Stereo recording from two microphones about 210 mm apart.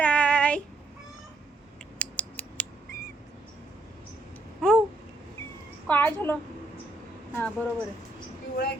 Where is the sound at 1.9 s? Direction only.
5° left (ahead or behind).